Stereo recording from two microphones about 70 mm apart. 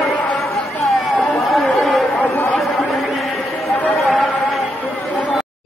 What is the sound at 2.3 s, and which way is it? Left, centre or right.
Chatter, left.